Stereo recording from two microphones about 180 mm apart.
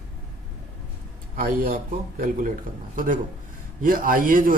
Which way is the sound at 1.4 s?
50° right (ahead or behind).